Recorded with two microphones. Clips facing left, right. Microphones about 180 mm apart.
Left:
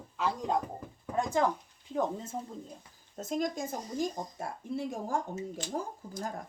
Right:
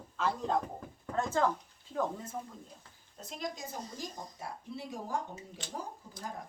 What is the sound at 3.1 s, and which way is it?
Speech, 45° left (ahead or behind).